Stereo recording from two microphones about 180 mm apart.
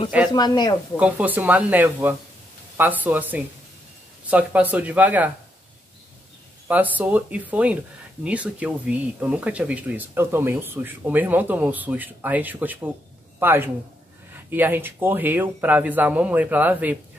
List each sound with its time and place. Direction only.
0.3 s speech: 25° left (ahead or behind)
0.9 s speech: 10° right (ahead or behind)
6.7 s speech: 10° right (ahead or behind)